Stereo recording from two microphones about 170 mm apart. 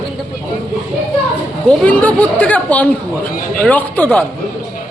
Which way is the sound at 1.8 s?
10° left (ahead or behind).